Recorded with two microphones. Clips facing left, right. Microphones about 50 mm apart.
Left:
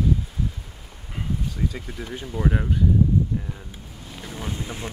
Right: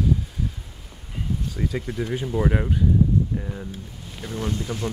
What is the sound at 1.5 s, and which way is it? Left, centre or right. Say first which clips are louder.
Speech: right 3 dB; centre.